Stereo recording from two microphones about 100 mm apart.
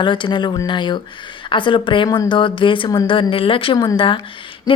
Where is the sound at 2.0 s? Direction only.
40° left (ahead or behind); by 3.8 s 60° left (ahead or behind).